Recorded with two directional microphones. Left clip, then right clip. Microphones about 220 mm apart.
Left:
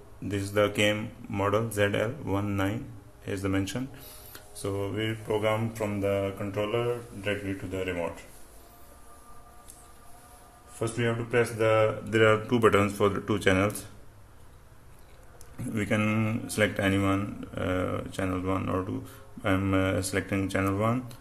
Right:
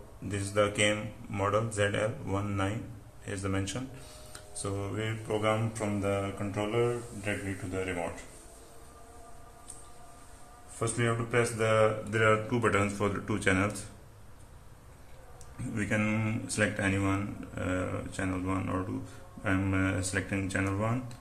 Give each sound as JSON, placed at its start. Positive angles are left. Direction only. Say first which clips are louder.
{"t": 0.3, "sound": "speech", "louder": "left 3 dB", "side_deg": 40}
{"t": 10.8, "sound": "speech", "louder": "left 2 dB", "side_deg": 25}
{"t": 12.1, "sound": "speech", "louder": "left 4 dB", "side_deg": 45}
{"t": 15.6, "sound": "speech", "louder": "left 3 dB", "side_deg": 40}